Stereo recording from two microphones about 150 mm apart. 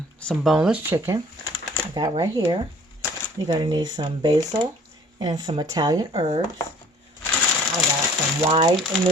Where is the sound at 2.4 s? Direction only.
35° right (ahead or behind).